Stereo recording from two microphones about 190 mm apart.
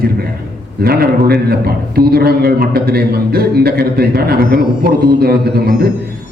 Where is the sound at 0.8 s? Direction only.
55° right (ahead or behind).